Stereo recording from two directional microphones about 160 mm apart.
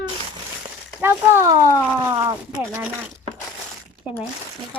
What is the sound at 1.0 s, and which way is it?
Speech, 15° right (ahead or behind).